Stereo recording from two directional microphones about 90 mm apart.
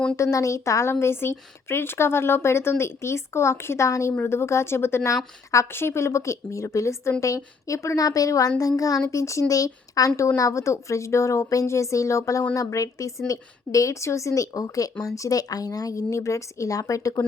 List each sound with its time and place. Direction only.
0.2 s a woman's voice: 35° left (ahead or behind)